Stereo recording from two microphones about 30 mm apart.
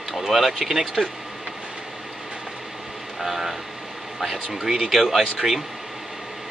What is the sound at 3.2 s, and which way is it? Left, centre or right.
Speech, centre.